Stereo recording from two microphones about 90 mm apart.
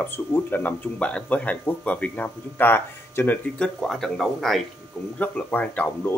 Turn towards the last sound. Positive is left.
turn(degrees=20)  # may be behind; listen again after turning